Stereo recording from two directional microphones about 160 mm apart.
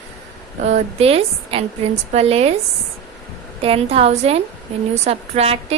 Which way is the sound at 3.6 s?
35° right (ahead or behind).